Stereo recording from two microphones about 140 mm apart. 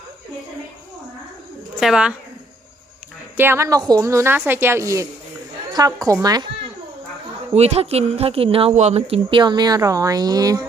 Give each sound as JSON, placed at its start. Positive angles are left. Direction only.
{"t": 1.8, "sound": "speech", "side_deg": -5}
{"t": 3.3, "sound": "speech", "side_deg": -15}
{"t": 7.5, "sound": "speech", "side_deg": -50}
{"t": 8.7, "sound": "speech", "side_deg": -55}